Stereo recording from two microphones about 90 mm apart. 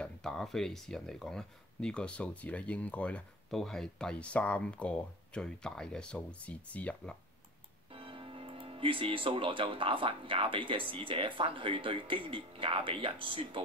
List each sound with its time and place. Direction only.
0.0 s speech: 5° left (ahead or behind)
3.4 s speech: 5° left (ahead or behind)
7.9 s speech: 90° right